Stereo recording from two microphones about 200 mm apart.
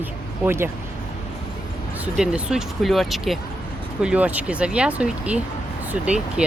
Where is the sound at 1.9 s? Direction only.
5° right (ahead or behind).